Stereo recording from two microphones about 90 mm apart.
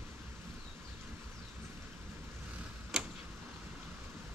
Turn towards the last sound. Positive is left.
turn(degrees=-5)  # may be behind; listen again after turning